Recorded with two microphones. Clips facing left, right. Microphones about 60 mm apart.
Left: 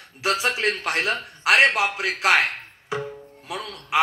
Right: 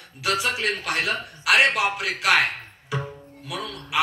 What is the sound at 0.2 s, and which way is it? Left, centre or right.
A man's voice, left.